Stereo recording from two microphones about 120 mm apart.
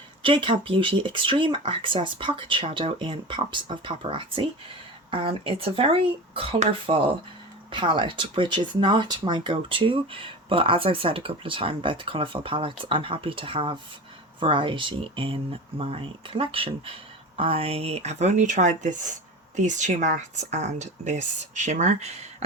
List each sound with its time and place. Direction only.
0.2 s speech: 45° right (ahead or behind); by 21.9 s 85° right